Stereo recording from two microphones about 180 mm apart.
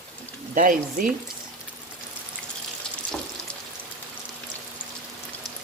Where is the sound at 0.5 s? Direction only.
45° right (ahead or behind).